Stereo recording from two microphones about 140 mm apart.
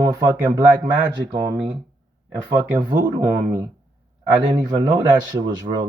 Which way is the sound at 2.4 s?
15° right (ahead or behind).